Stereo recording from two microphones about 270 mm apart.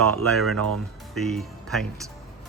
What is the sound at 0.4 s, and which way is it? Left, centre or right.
Speech, right.